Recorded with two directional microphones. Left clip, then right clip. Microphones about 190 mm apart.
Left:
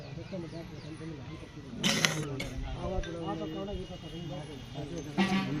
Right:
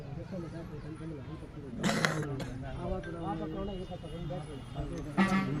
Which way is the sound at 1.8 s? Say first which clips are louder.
Left 2 dB; 40° right (ahead or behind).